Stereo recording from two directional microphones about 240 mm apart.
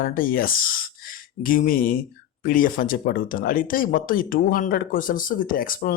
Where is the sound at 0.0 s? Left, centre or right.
Left.